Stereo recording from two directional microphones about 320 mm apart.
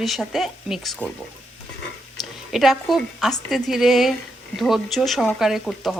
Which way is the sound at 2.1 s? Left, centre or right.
Centre.